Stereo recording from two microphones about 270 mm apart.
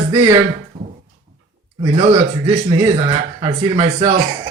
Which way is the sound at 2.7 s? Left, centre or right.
Centre.